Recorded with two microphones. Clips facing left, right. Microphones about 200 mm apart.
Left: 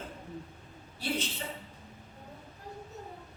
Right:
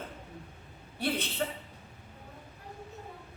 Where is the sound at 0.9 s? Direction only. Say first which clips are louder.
Right 2 dB; 60° right (ahead or behind).